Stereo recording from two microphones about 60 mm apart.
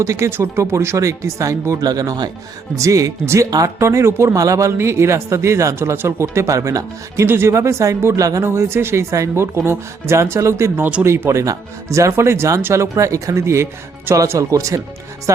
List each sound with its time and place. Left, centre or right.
0.0 s speech: right
0.3 s speech: right
0.6 s speech: right
2.7 s speech: right
3.8 s speech: right
4.4 s speech: right
7.3 s speech: right
8.4 s speech: right
14.3 s speech: right